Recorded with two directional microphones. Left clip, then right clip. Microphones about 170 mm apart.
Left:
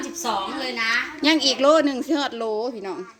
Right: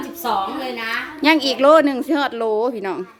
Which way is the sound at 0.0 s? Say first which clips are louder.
Right 4 dB; 75° right (ahead or behind).